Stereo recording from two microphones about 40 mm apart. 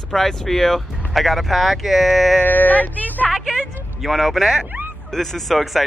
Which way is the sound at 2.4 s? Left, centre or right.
Left.